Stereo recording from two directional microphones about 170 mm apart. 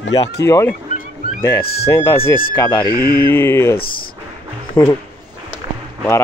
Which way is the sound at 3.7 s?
60° left (ahead or behind).